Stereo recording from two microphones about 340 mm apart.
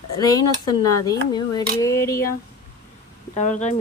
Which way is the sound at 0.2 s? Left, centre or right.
Centre.